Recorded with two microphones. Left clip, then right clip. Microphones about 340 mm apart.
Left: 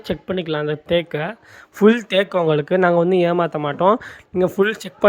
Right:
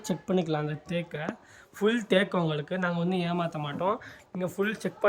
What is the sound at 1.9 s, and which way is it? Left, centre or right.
Speech, centre.